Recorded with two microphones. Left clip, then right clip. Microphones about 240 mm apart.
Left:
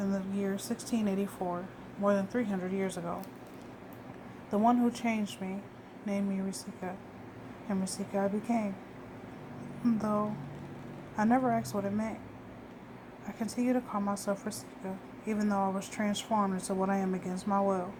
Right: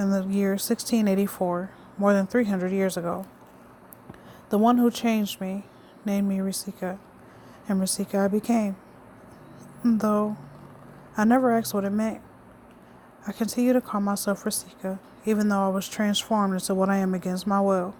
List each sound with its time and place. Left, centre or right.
0.0 s speech: right
4.4 s speech: right
9.8 s speech: right
13.2 s speech: right